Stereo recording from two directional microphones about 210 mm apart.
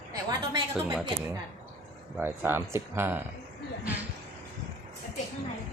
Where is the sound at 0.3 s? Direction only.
20° right (ahead or behind).